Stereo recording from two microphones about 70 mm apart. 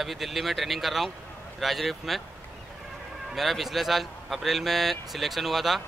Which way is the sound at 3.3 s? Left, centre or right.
Centre.